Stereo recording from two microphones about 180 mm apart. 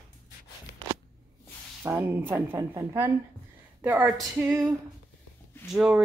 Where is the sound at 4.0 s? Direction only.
Centre (ahead or behind).